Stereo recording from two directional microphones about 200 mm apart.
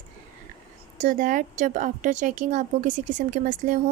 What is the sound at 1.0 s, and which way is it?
Speech, 45° right (ahead or behind).